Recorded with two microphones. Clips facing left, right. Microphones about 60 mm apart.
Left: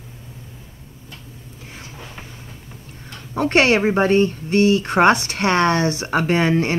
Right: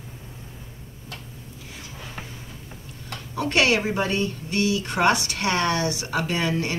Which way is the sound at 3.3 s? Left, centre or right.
Left.